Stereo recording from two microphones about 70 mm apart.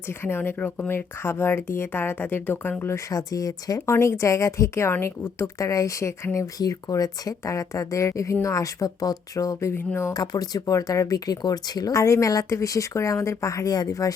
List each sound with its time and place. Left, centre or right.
0.1 s speech: left
3.1 s speech: left
3.8 s speech: left
6.6 s speech: left
9.7 s speech: left
10.1 s speech: left
11.9 s speech: left